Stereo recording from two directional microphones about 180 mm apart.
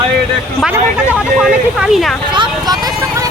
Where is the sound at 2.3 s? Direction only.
25° right (ahead or behind).